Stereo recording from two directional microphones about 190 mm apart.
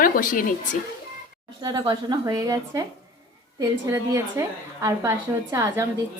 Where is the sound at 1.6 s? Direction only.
20° right (ahead or behind).